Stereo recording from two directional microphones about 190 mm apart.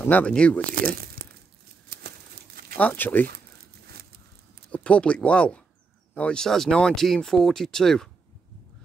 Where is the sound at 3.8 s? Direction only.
55° right (ahead or behind).